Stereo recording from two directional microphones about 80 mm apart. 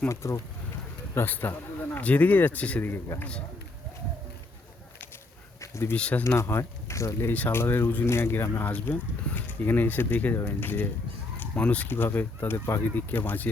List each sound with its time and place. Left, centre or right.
0.1 s speech: left
1.1 s speech: left
5.5 s a sound: left
6.0 s speech: centre
6.2 s speech: left
7.3 s speech: left
11.3 s fowl: centre
11.9 s speech: left